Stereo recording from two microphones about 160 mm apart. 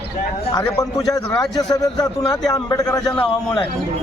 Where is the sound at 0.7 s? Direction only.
25° left (ahead or behind).